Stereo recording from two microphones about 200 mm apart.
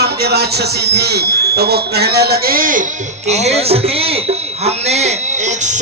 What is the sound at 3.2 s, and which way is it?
Speech, 35° right (ahead or behind).